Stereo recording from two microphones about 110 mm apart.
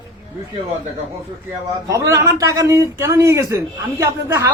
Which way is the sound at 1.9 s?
30° right (ahead or behind).